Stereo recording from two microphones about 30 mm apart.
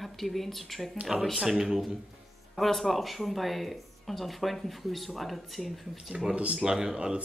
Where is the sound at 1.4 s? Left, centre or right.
Centre.